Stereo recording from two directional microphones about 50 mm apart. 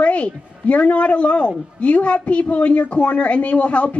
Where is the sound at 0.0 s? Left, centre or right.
Left.